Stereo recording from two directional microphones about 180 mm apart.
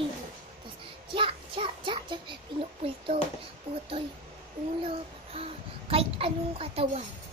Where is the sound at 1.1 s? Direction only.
30° right (ahead or behind).